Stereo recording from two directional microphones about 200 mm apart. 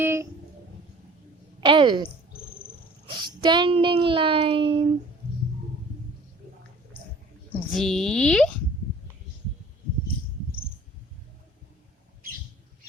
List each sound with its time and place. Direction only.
0.0 s a sound: 15° right (ahead or behind)
1.6 s a child's voice: 25° right (ahead or behind)
3.2 s a child's voice: 25° right (ahead or behind)
7.7 s a woman's voice: centre (ahead or behind)